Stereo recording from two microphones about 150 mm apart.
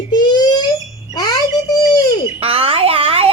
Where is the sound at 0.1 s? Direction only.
30° left (ahead or behind).